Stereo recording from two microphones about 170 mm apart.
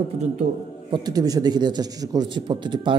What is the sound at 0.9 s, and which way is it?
A man's voice, 20° right (ahead or behind).